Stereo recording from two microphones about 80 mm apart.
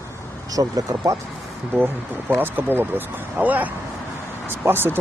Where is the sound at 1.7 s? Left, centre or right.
Right.